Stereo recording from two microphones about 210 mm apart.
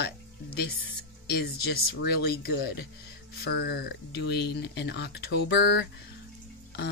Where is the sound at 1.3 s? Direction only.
50° left (ahead or behind).